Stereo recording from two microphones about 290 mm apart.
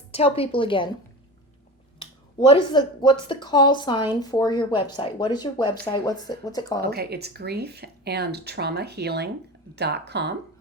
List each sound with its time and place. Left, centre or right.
0.1 s a woman's voice: left
2.5 s a woman's voice: centre
6.8 s speech: right